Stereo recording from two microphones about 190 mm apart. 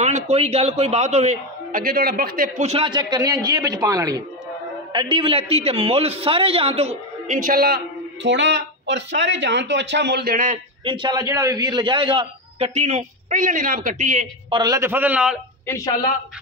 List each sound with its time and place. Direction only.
0.0 s a man's voice: 35° right (ahead or behind)
10.8 s a man's voice: 25° right (ahead or behind)
14.5 s a man's voice: 20° right (ahead or behind)
15.6 s speech: 15° left (ahead or behind)